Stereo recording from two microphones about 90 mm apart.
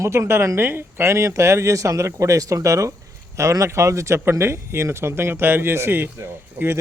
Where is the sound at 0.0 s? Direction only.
30° right (ahead or behind).